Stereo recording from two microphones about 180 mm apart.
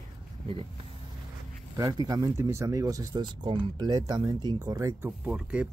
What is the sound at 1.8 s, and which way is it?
Speech, 20° right (ahead or behind).